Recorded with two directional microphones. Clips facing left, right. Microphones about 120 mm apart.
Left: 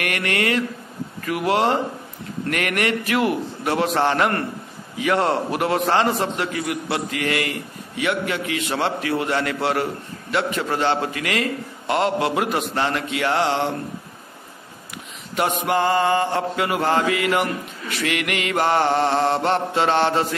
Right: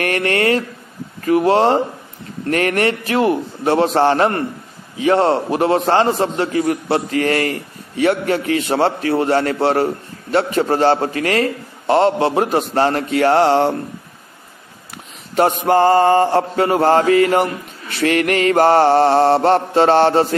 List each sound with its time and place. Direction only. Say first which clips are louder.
0.0 s mantra: right 6 dB; 35° right (ahead or behind)
15.3 s mantra: right 7 dB; 40° right (ahead or behind)